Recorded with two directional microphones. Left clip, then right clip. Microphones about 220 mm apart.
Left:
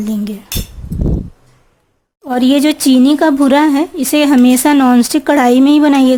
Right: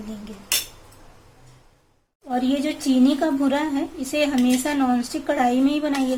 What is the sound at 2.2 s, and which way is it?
Speech, 50° left (ahead or behind).